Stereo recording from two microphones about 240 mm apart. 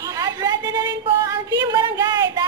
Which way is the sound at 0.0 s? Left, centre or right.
Centre.